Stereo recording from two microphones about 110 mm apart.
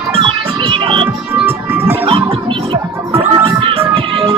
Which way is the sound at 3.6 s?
55° right (ahead or behind).